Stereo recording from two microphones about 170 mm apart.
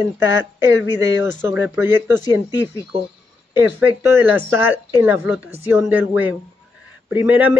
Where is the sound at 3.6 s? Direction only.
10° right (ahead or behind).